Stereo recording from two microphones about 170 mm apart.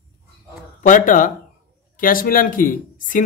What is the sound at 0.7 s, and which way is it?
Speech, 50° left (ahead or behind).